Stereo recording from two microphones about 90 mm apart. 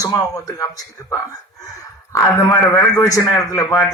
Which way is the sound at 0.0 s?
35° left (ahead or behind).